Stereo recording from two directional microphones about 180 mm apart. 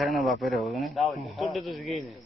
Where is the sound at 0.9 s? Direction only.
Centre (ahead or behind).